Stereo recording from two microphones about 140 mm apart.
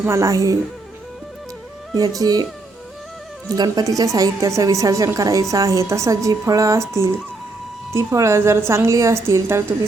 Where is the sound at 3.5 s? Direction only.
30° right (ahead or behind).